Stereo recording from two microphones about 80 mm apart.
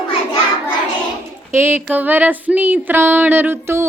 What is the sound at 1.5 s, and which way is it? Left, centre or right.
Music, right.